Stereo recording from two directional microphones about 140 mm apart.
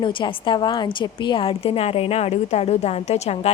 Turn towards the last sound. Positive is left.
turn(degrees=50)  # may be behind; listen again after turning